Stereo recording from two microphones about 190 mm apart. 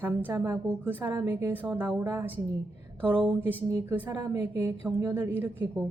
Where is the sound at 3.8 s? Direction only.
10° right (ahead or behind).